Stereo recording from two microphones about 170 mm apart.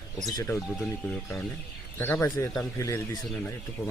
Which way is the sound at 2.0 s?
15° left (ahead or behind).